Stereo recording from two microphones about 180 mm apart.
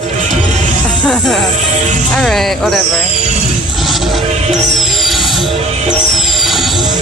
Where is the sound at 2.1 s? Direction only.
Centre (ahead or behind).